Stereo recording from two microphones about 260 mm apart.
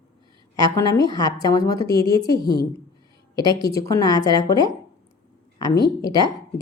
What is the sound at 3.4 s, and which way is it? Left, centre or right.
A woman's voice, centre.